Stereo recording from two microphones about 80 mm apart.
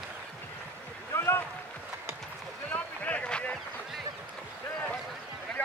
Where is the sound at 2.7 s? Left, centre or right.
Centre.